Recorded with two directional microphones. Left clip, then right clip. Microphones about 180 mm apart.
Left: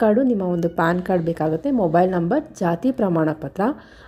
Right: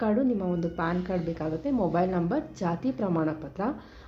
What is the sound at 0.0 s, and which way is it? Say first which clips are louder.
A woman's voice: left 9 dB; 40° left (ahead or behind).